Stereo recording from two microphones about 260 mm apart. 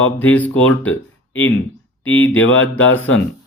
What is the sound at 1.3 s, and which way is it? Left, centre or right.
Mantra, left.